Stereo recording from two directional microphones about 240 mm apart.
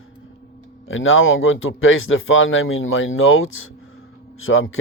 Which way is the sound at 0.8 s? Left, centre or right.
Left.